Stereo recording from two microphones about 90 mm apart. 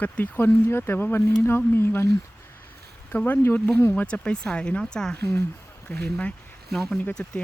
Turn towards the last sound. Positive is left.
turn(degrees=10)  # may be behind; listen again after turning